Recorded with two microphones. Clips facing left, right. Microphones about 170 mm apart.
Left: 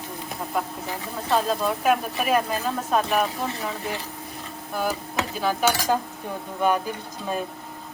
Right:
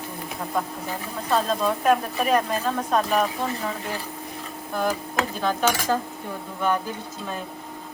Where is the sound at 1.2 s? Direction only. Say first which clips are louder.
Even; 5° left (ahead or behind).